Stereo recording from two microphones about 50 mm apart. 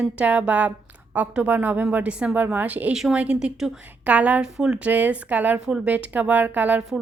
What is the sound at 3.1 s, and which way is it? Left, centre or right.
Speech, right.